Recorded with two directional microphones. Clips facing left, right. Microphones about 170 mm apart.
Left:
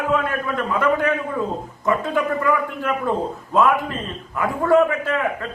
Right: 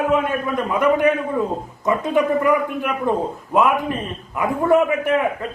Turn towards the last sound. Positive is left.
turn(degrees=-20)  # may be behind; listen again after turning